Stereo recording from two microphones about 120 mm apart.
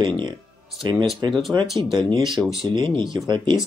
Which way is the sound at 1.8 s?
40° right (ahead or behind).